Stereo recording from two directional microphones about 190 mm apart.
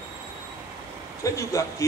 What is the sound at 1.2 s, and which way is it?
Speech, 15° left (ahead or behind).